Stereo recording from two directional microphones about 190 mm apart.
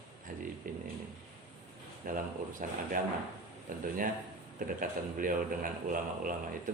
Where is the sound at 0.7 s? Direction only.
45° right (ahead or behind).